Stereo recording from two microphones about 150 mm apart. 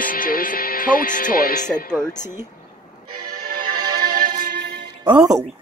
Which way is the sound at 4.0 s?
75° right (ahead or behind).